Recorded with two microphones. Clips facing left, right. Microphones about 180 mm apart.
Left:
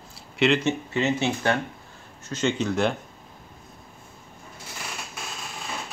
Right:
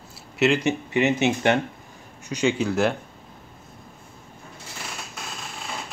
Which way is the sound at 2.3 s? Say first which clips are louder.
Right 2 dB; 10° right (ahead or behind).